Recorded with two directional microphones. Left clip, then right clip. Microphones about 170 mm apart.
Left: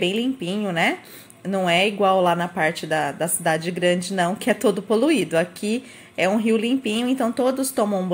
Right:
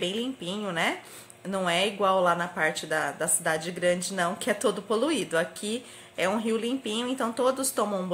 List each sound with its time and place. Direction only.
0.0 s speech: 10° left (ahead or behind)